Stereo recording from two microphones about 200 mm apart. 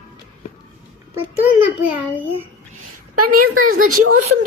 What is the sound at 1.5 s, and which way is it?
Child singing, 10° right (ahead or behind).